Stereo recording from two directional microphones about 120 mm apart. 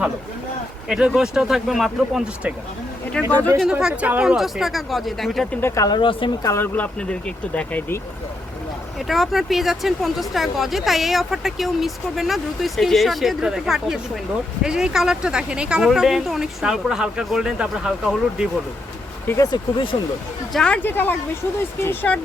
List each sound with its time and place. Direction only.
0.9 s speech: 5° right (ahead or behind)
3.6 s speech: 5° right (ahead or behind)
5.5 s speech: 25° left (ahead or behind)
6.0 s speech: 45° left (ahead or behind)
6.4 s speech: 25° left (ahead or behind)
6.7 s speech: 10° left (ahead or behind)
9.0 s speech: centre (ahead or behind)
19.4 s speech: 40° left (ahead or behind)
20.5 s speech: 5° left (ahead or behind)
20.8 s speech: 15° left (ahead or behind)